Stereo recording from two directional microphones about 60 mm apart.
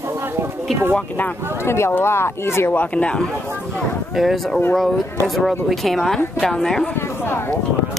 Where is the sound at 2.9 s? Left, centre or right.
Centre.